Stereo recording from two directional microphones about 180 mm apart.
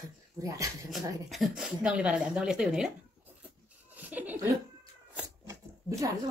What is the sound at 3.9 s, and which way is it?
Chuckle, 10° right (ahead or behind).